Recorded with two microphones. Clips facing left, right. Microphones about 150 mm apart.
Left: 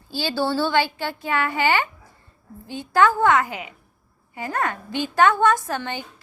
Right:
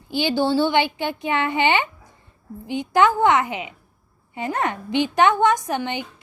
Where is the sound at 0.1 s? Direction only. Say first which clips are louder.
Right 4 dB; 20° right (ahead or behind).